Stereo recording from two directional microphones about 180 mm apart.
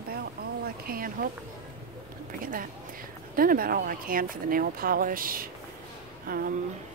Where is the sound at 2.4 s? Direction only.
50° right (ahead or behind).